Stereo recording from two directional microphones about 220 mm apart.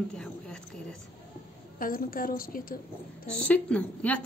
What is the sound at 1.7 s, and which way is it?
A woman's voice, 40° left (ahead or behind).